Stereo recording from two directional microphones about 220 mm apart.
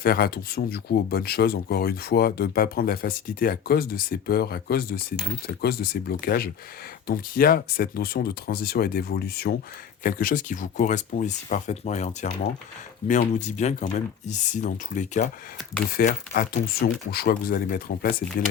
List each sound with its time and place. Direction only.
0.0 s speech: 45° left (ahead or behind)